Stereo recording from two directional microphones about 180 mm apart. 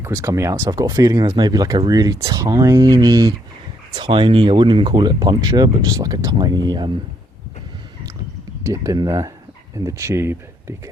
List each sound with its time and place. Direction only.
0.0 s speech: 15° right (ahead or behind)
8.6 s speech: 20° right (ahead or behind)